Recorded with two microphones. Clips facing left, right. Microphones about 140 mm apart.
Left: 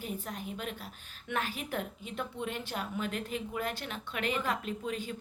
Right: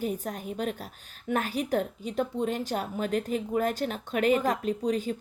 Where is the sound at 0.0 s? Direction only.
45° right (ahead or behind).